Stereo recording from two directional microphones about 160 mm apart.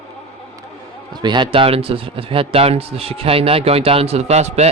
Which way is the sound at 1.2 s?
30° right (ahead or behind).